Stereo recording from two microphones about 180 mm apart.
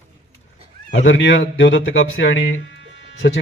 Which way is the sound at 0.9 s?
90° left.